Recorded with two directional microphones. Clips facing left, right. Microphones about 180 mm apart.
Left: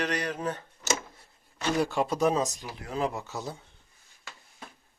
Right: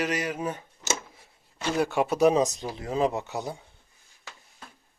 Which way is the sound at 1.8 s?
5° right (ahead or behind).